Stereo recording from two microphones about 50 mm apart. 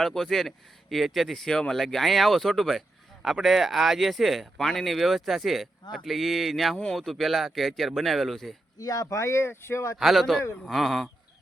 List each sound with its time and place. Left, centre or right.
0.0 s speech: centre
9.0 s speech: left
10.0 s speech: centre